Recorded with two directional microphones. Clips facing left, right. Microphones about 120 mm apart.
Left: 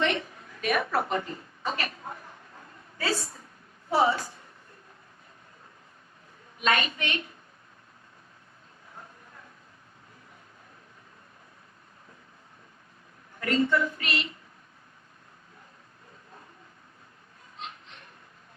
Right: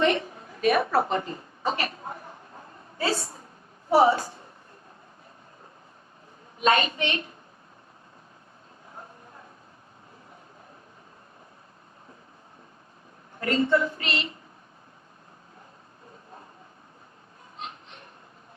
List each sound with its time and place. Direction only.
0.6 s a sound: 30° right (ahead or behind)
3.0 s a woman's voice: 25° right (ahead or behind)
6.6 s a woman's voice: 30° right (ahead or behind)
13.4 s a woman's voice: 30° right (ahead or behind)